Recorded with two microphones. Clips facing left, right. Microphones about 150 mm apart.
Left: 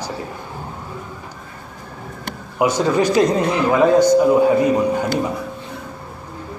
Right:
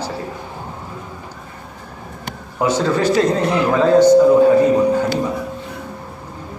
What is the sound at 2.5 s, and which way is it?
A man's voice, 15° left (ahead or behind).